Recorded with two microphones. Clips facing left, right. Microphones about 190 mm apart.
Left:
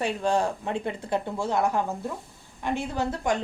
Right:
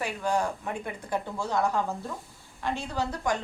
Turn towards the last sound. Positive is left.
turn(degrees=20)  # may be behind; listen again after turning